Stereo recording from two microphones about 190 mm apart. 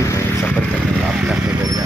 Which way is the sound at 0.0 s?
15° left (ahead or behind).